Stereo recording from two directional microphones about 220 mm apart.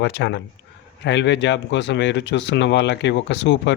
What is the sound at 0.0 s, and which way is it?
Speech, 50° left (ahead or behind).